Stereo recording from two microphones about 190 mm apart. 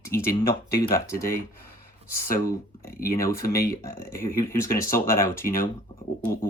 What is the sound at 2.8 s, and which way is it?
Speech, 50° left (ahead or behind).